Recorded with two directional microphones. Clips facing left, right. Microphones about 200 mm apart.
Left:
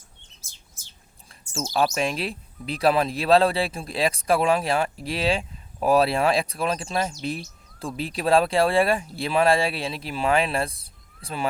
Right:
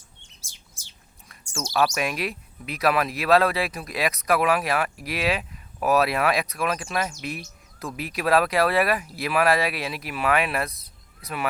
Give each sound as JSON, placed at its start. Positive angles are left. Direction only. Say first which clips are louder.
{"t": 1.7, "sound": "speech", "louder": "even", "side_deg": 30}